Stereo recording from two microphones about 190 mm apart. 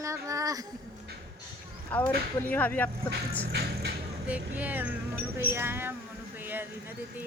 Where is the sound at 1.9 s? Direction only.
10° left (ahead or behind).